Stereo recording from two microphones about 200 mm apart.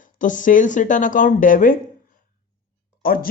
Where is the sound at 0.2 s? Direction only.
40° left (ahead or behind).